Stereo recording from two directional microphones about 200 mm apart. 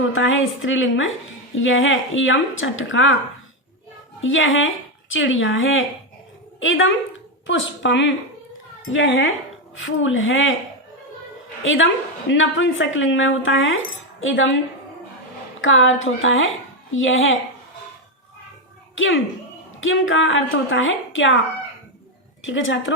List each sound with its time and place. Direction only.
0.1 s speech: 75° left (ahead or behind)
4.2 s speech: 75° left (ahead or behind)
11.6 s a woman's voice: 75° left (ahead or behind)
15.6 s a woman's voice: 75° left (ahead or behind)
18.9 s speech: 75° left (ahead or behind)
22.4 s speech: 75° left (ahead or behind)